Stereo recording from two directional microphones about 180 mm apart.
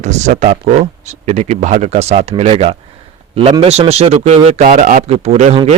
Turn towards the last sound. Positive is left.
turn(degrees=-35)  # may be behind; listen again after turning